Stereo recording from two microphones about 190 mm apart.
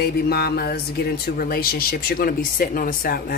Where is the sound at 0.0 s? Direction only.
55° left (ahead or behind).